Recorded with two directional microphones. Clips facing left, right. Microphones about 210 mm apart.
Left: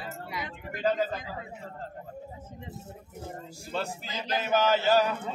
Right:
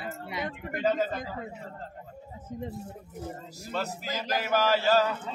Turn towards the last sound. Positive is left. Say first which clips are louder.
# even
turn(degrees=15)  # may be behind; listen again after turning